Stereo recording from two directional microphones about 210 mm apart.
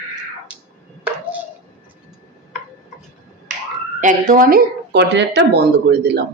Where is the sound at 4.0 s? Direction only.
40° right (ahead or behind).